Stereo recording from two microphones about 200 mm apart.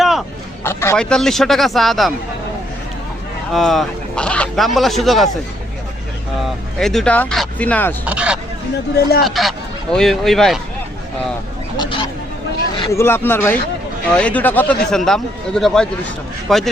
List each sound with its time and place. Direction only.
0.0 s a sound: centre (ahead or behind)
0.6 s a man's voice: 10° left (ahead or behind)
3.5 s speech: centre (ahead or behind)
6.4 s speech: centre (ahead or behind)
8.0 s speech: 5° right (ahead or behind)
11.8 s a sound: 25° left (ahead or behind)
12.7 s speech: 20° left (ahead or behind); by 16.6 s centre (ahead or behind)